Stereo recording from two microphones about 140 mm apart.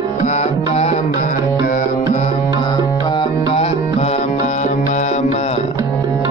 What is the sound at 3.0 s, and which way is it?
Music, 35° left (ahead or behind).